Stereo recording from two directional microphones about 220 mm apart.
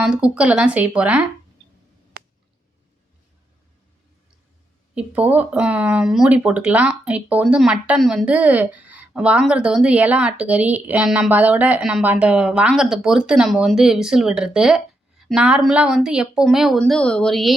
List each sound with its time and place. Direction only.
0.0 s speech: 5° right (ahead or behind)
4.9 s speech: 5° right (ahead or behind)